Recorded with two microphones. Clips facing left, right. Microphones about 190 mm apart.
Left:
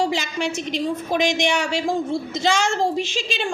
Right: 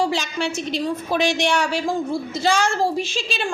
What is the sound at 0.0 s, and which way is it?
A woman's voice, 15° left (ahead or behind).